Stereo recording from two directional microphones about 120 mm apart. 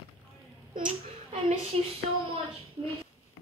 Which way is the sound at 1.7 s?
60° right (ahead or behind).